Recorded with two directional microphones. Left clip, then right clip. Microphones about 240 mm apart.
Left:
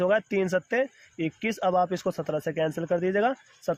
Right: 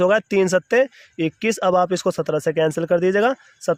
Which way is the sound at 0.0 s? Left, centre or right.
Right.